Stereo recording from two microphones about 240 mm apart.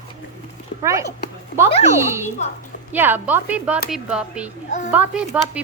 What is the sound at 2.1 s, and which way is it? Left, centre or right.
Speech, centre.